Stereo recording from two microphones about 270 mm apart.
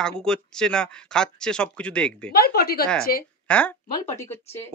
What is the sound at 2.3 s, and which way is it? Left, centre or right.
Speech, left.